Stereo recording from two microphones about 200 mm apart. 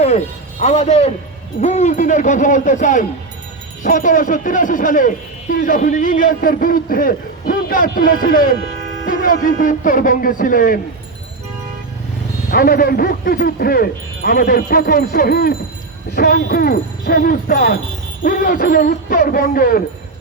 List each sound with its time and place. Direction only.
0.6 s a man's voice: 35° left (ahead or behind)
12.5 s a man's voice: 50° left (ahead or behind)